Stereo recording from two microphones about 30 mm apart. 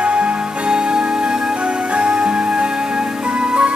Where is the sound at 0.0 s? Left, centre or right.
Right.